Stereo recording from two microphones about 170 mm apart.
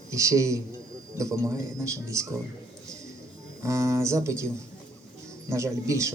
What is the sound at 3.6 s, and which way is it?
Speech, 20° right (ahead or behind).